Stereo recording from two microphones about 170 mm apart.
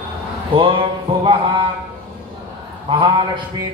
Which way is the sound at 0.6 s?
30° right (ahead or behind).